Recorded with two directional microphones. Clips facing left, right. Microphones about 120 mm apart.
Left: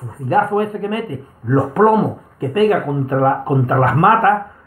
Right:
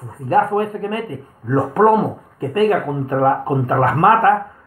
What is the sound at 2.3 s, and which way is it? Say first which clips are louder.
Speech: left 1 dB; 35° right (ahead or behind).